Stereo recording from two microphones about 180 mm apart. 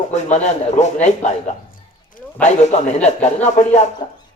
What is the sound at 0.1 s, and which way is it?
A man's voice, 40° left (ahead or behind).